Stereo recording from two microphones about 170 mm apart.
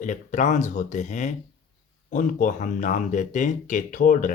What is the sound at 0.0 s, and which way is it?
Speech, 45° left (ahead or behind).